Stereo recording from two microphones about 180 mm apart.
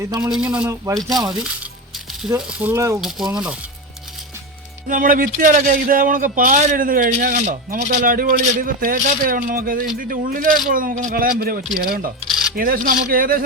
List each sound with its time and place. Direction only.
0.2 s speech: 5° right (ahead or behind)
2.5 s speech: 10° right (ahead or behind)
3.0 s speech: centre (ahead or behind)
4.9 s a man's voice: 50° right (ahead or behind)